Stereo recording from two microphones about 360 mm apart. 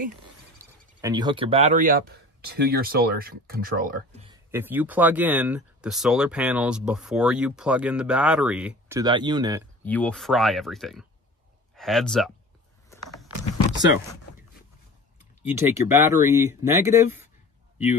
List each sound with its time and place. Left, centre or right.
1.0 s speech: centre
4.3 s speech: centre
9.8 s speech: centre
12.9 s a sound: centre
15.4 s speech: centre